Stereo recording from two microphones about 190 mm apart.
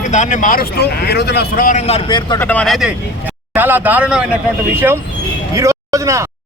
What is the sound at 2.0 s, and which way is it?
Speech, 25° left (ahead or behind).